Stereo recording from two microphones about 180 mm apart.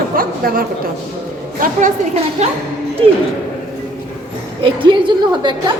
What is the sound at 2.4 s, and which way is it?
Speech, 40° right (ahead or behind).